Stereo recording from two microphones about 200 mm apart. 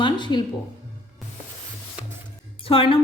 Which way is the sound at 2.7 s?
25° left (ahead or behind).